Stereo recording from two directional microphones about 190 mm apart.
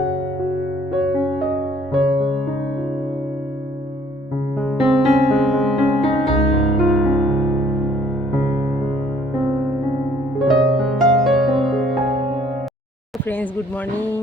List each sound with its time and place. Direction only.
0.9 s music: centre (ahead or behind)
4.6 s music: centre (ahead or behind)
10.3 s music: centre (ahead or behind)
13.2 s a sound: 10° left (ahead or behind)